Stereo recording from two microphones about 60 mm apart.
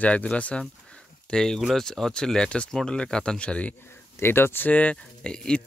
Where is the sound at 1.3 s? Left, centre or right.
Centre.